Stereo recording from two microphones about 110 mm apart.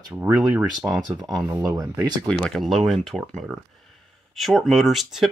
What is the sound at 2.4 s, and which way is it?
Speech, centre (ahead or behind).